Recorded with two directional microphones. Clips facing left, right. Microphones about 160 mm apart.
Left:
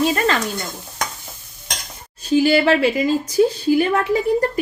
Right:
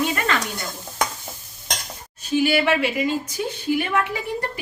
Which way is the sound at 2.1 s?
35° left (ahead or behind).